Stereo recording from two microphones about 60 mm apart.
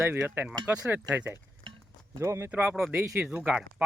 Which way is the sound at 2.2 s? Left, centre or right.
Right.